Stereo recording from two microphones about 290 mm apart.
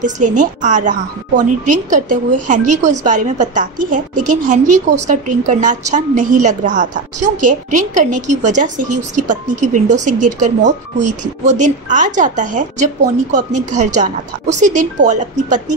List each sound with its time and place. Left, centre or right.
0.0 s a woman's voice: right